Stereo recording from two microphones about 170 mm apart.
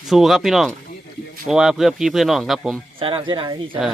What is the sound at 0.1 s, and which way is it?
Speech, centre (ahead or behind).